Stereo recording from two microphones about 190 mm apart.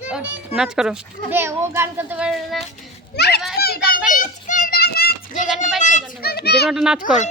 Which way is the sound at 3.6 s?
50° left (ahead or behind).